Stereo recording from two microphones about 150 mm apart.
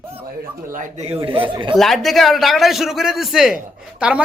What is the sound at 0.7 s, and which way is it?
Speech, 55° right (ahead or behind).